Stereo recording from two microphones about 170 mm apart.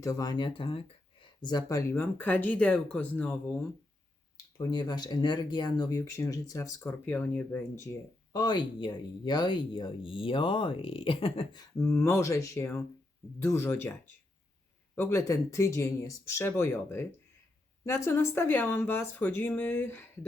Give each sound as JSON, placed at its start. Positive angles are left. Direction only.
{"t": 0.0, "sound": "speech", "side_deg": 20}
{"t": 4.5, "sound": "speech", "side_deg": 25}
{"t": 11.8, "sound": "speech", "side_deg": 15}